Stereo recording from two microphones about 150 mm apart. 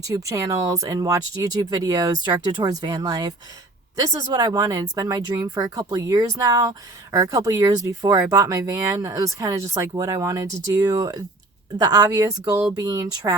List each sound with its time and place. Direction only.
0.0 s speech: 20° right (ahead or behind)